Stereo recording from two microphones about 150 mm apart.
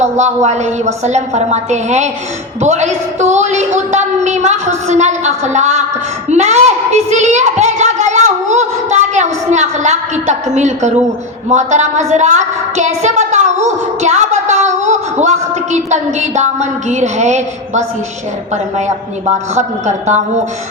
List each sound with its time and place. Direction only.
0.0 s a child's voice: 50° right (ahead or behind)